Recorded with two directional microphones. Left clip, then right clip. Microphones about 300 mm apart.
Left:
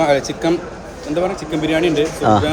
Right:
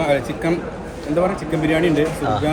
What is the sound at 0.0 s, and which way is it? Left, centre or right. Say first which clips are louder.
Speech: left 4 dB; left.